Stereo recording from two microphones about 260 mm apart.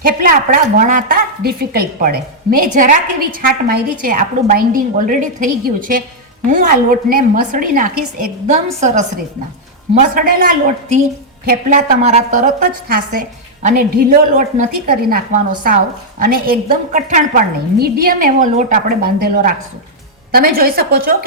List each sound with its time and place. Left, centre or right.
0.0 s a woman's voice: right